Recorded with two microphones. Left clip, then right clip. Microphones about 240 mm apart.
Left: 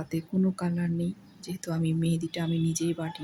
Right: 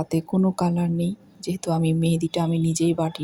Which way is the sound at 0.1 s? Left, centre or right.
Centre.